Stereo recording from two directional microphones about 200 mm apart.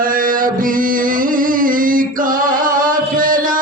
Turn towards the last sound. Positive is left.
turn(degrees=-45)  # may be behind; listen again after turning